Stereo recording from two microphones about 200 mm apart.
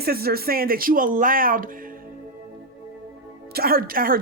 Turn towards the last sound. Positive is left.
turn(degrees=-45)  # may be behind; listen again after turning